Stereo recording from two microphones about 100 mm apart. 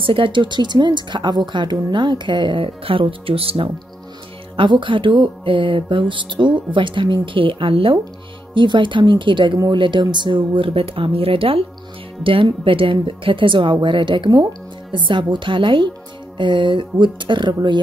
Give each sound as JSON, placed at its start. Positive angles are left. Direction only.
{"t": 0.0, "sound": "speech", "side_deg": -60}
{"t": 4.6, "sound": "speech", "side_deg": -55}